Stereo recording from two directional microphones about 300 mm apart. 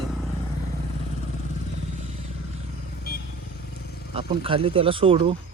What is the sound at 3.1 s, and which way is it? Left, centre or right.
Vehicle, left.